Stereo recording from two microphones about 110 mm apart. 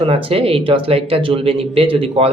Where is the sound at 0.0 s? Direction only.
60° right (ahead or behind).